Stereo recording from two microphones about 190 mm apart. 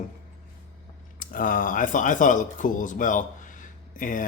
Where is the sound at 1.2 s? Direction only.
45° left (ahead or behind).